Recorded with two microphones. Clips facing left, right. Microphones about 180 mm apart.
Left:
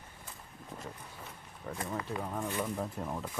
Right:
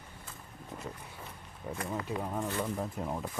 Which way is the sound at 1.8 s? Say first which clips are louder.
Right 2 dB; 5° right (ahead or behind).